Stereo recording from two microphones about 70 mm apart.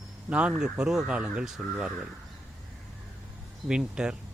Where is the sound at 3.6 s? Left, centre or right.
Centre.